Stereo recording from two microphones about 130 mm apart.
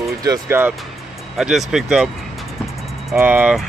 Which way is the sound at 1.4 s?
5° right (ahead or behind).